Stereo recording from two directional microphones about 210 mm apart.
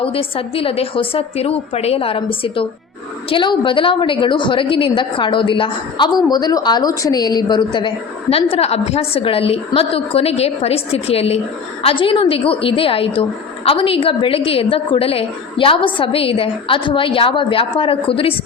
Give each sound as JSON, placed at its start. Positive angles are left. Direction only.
{"t": 0.0, "sound": "a woman's voice", "side_deg": 25}